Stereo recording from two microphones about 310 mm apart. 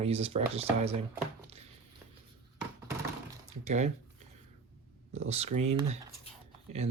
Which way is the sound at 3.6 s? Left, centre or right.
Right.